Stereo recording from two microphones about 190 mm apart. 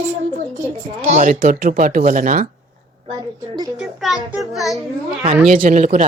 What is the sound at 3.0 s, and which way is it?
Speech, 20° right (ahead or behind).